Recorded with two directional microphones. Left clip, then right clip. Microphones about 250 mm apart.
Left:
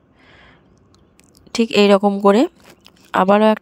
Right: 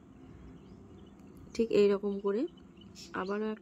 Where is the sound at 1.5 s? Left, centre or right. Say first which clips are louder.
Left 13 dB; left.